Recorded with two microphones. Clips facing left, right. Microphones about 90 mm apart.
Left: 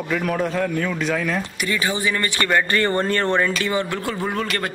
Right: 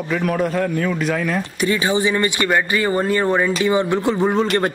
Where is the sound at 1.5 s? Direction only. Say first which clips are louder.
Right 5 dB; 25° right (ahead or behind).